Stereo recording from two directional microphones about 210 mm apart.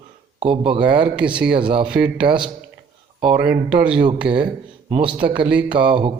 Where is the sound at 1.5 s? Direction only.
25° right (ahead or behind).